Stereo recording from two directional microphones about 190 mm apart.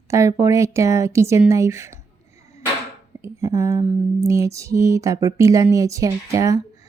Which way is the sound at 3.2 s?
15° right (ahead or behind).